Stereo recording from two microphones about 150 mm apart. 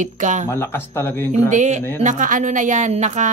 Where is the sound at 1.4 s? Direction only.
55° right (ahead or behind).